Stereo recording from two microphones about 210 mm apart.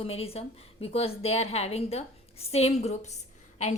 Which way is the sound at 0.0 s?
30° left (ahead or behind).